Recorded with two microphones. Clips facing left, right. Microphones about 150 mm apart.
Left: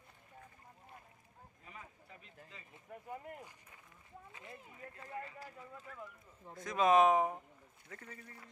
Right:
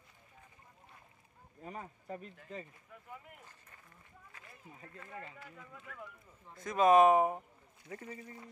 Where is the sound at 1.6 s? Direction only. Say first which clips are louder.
Right 10 dB; 40° right (ahead or behind).